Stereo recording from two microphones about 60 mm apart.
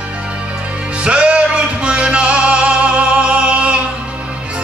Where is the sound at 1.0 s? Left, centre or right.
Centre.